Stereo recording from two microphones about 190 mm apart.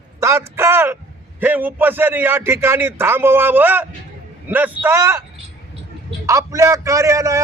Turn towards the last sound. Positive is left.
turn(degrees=-15)  # may be behind; listen again after turning